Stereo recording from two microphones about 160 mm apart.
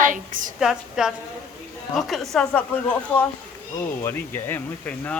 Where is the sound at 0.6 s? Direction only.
5° right (ahead or behind).